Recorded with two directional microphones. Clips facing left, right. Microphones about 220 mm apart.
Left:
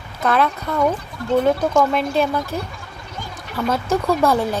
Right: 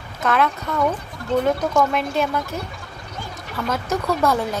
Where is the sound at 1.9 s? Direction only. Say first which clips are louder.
Left 3 dB; 35° left (ahead or behind).